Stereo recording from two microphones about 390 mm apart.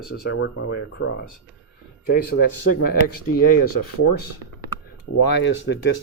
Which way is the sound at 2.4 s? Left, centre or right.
Left.